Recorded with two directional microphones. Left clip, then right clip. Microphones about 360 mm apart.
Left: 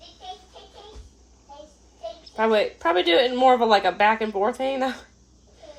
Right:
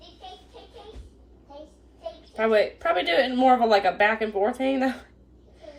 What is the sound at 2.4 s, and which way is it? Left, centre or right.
Speech, left.